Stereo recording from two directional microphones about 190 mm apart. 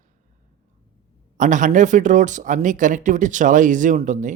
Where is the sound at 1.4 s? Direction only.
40° right (ahead or behind).